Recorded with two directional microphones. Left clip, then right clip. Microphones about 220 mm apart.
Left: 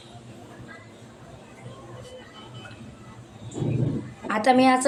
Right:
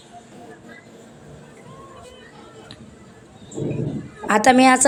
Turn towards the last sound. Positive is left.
turn(degrees=-35)  # may be behind; listen again after turning